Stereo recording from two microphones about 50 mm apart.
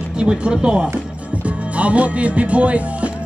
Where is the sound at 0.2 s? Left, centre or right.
Centre.